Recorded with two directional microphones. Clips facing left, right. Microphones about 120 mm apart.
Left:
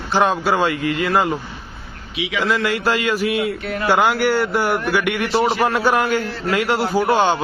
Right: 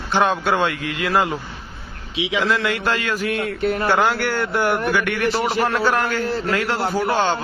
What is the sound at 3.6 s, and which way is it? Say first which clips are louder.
Speech: right 5 dB; 40° right (ahead or behind).